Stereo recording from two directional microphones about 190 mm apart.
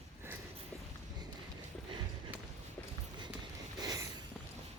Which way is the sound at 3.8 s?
20° right (ahead or behind).